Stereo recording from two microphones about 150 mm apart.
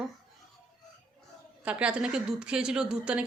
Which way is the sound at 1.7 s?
10° right (ahead or behind).